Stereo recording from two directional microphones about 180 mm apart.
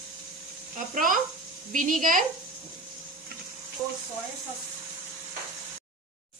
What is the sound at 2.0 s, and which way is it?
Speech, 50° right (ahead or behind).